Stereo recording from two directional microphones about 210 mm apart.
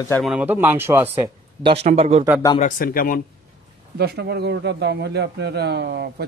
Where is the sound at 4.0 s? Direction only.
50° right (ahead or behind).